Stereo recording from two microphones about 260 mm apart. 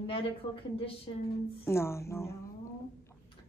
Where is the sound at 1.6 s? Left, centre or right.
Centre.